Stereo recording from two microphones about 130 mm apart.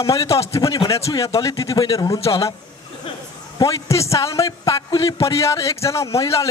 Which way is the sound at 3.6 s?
25° left (ahead or behind).